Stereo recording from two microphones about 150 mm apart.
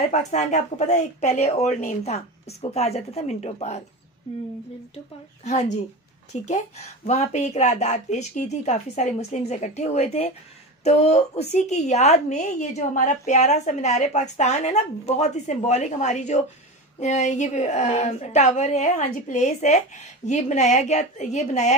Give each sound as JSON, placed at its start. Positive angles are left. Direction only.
{"t": 0.1, "sound": "a woman's voice", "side_deg": 50}
{"t": 4.9, "sound": "a woman's voice", "side_deg": 45}